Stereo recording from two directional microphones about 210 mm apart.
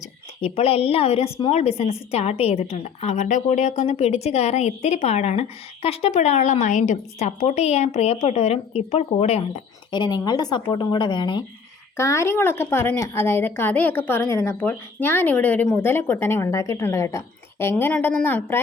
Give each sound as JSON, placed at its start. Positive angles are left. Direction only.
{"t": 0.4, "sound": "a woman's voice", "side_deg": 30}